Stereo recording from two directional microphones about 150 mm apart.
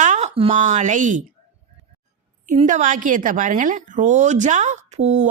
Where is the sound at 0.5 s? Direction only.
55° right (ahead or behind).